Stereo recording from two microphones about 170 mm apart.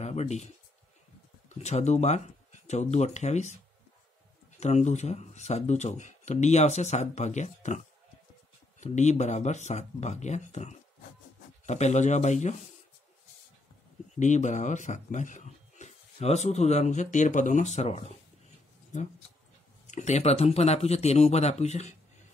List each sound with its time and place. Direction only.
0.0 s speech: 40° left (ahead or behind)
1.6 s speech: 40° left (ahead or behind)
4.6 s speech: 40° left (ahead or behind)
14.2 s speech: 45° left (ahead or behind)
19.9 s speech: 45° left (ahead or behind)